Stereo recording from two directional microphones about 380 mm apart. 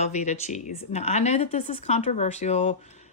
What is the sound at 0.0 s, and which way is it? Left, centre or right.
A woman's voice, centre.